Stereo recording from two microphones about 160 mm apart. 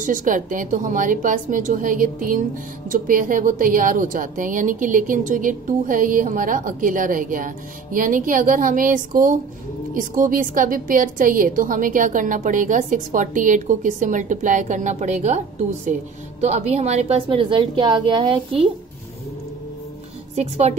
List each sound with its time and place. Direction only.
0.0 s a woman's voice: 55° right (ahead or behind); by 18.7 s 35° right (ahead or behind)
20.3 s a woman's voice: 45° right (ahead or behind)